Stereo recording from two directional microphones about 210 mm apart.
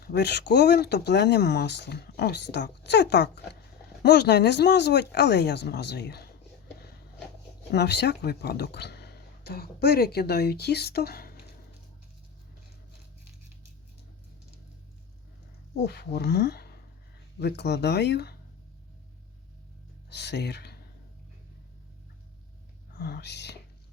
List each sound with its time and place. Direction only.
0.0 s speech: 50° left (ahead or behind)
7.7 s speech: 55° left (ahead or behind)
15.8 s speech: 50° left (ahead or behind)
20.1 s speech: 55° left (ahead or behind)
23.0 s speech: 50° left (ahead or behind)